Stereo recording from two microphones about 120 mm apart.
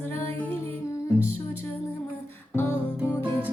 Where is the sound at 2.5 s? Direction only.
20° left (ahead or behind).